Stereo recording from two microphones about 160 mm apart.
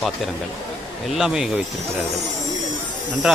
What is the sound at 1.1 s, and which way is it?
Speech, 5° right (ahead or behind).